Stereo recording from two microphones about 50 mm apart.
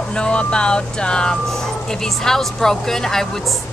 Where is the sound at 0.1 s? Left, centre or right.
Centre.